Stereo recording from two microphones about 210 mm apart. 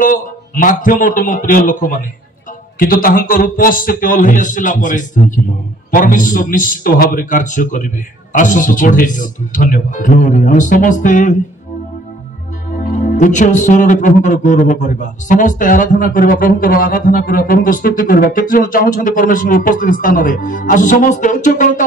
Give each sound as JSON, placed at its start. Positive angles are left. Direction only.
{"t": 0.0, "sound": "speech", "side_deg": 40}
{"t": 12.9, "sound": "speech", "side_deg": 35}